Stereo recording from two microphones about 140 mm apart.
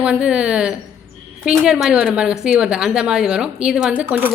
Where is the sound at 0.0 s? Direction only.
5° right (ahead or behind).